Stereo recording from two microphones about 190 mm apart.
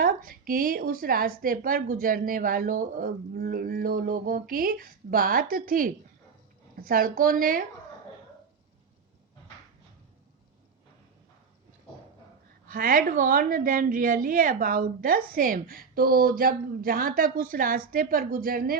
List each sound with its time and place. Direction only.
0.0 s a woman's voice: 50° right (ahead or behind)
12.6 s a woman's voice: 50° right (ahead or behind)